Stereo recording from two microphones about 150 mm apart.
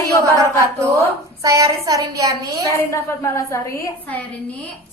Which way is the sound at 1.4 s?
20° right (ahead or behind).